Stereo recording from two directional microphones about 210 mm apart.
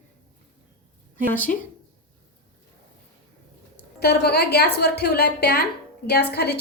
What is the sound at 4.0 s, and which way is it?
A woman's voice, 50° left (ahead or behind).